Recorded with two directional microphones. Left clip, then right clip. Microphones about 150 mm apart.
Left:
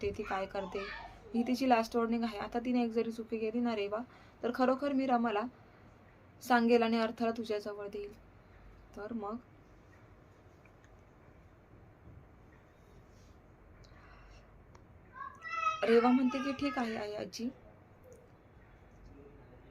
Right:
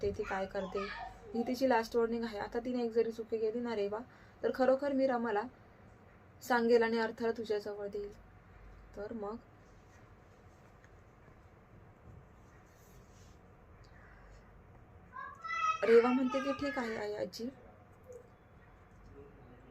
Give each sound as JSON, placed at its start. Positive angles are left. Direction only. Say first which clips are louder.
{"t": 0.0, "sound": "a woman's voice", "louder": "even", "side_deg": 15}
{"t": 15.8, "sound": "a woman's voice", "louder": "right 1 dB", "side_deg": 10}